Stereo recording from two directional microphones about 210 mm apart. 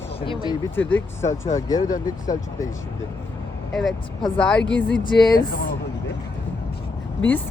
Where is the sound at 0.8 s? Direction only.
10° left (ahead or behind).